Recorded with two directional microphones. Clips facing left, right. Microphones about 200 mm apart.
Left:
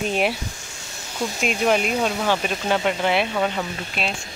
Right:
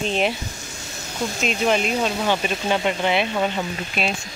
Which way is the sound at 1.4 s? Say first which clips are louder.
Left 1 dB; 5° left (ahead or behind).